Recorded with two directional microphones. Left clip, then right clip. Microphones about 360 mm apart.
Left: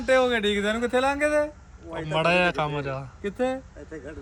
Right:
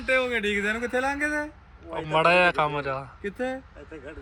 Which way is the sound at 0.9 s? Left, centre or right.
Centre.